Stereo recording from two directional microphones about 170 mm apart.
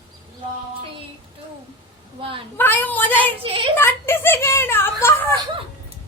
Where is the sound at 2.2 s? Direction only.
30° right (ahead or behind).